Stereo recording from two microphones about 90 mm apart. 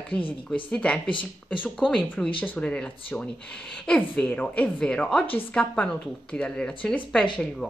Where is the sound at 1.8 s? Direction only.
5° left (ahead or behind).